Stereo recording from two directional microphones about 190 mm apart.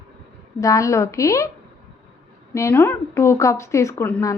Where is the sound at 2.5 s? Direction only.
15° left (ahead or behind).